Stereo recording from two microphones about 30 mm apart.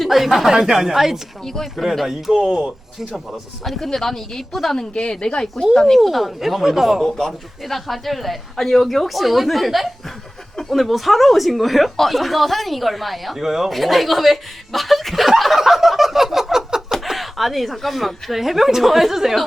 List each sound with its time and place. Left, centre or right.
0.1 s speech: centre
0.5 s speech: centre
1.7 s speech: centre
2.4 s speech: right
3.6 s speech: centre
3.8 s a woman's voice: centre
5.0 s speech: left
5.7 s a woman's voice: centre
6.1 s speech: centre
7.2 s speech: centre
13.4 s speech: centre
13.7 s speech: centre
16.5 s a sound: centre
17.1 s speech: centre